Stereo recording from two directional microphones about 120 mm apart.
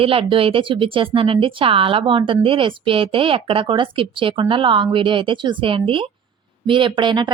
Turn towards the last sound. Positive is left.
turn(degrees=-40)  # may be behind; listen again after turning